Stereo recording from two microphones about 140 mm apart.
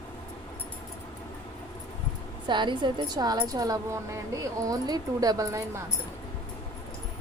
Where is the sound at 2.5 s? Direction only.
35° right (ahead or behind).